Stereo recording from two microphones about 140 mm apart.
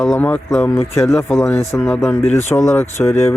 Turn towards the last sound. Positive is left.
turn(degrees=15)  # may be behind; listen again after turning